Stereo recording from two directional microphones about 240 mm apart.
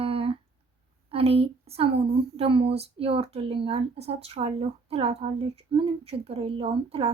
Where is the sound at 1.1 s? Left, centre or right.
Right.